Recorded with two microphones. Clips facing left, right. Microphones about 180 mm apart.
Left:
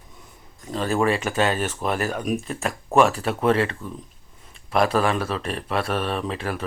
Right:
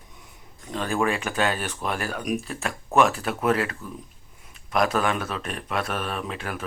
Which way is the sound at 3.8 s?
30° left (ahead or behind).